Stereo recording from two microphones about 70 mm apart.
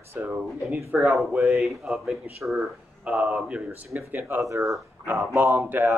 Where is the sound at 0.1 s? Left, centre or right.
Right.